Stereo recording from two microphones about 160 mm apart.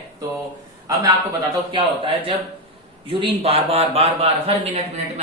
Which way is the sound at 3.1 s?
35° right (ahead or behind).